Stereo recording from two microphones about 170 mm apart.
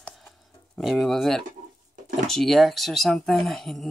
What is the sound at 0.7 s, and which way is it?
Speech, centre (ahead or behind).